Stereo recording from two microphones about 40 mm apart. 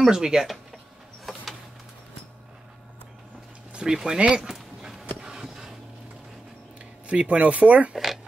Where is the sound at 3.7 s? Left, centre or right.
Centre.